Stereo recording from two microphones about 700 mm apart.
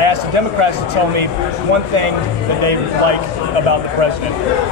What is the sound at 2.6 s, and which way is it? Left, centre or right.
Speech, right.